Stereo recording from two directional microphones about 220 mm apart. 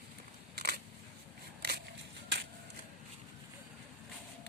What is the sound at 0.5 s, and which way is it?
Camera, 45° right (ahead or behind).